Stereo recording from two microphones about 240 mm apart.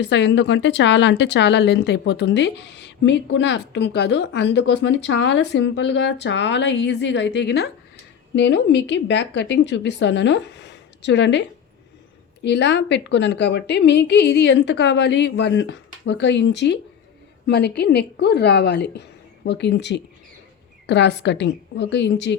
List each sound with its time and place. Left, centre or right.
0.0 s speech: left